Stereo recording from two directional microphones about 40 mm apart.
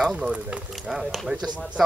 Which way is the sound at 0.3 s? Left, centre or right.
Right.